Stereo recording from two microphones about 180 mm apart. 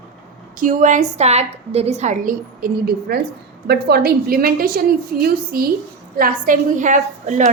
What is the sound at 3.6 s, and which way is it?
A woman's voice, 60° right (ahead or behind).